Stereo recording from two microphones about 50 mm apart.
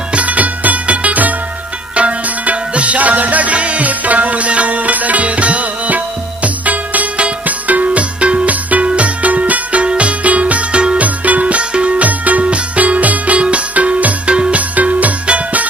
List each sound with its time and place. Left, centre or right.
0.1 s music: right
14.8 s music: right